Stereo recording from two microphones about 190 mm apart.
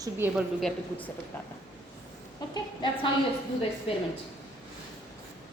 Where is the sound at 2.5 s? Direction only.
25° left (ahead or behind).